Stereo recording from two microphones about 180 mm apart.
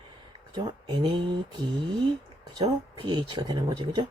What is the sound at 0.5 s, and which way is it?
Speech, 25° right (ahead or behind).